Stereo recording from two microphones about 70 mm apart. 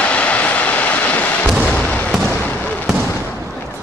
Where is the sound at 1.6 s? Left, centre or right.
Centre.